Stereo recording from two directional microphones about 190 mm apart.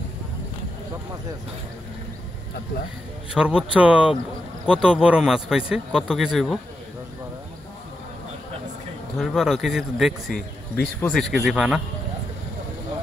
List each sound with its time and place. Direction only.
3.3 s speech: 5° right (ahead or behind)
9.2 s speech: centre (ahead or behind)